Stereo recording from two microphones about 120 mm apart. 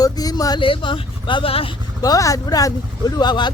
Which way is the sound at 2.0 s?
30° left (ahead or behind).